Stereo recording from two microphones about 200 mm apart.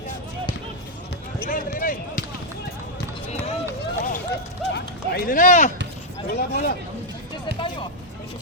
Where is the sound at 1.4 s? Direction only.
45° left (ahead or behind).